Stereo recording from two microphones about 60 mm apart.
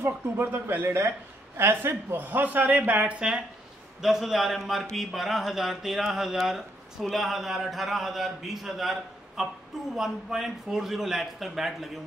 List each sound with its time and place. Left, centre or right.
0.0 s speech: right; by 12.0 s centre